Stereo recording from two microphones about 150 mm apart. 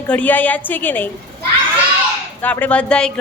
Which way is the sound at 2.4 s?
10° left (ahead or behind).